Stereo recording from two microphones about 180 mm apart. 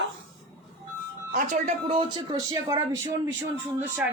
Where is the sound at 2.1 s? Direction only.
20° right (ahead or behind).